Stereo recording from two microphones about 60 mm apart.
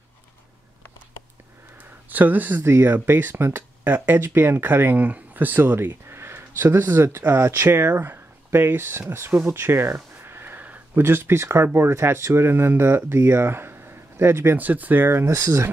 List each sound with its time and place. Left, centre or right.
2.0 s speech: right
2.6 s speech: right
10.2 s sniff: right
11.0 s speech: right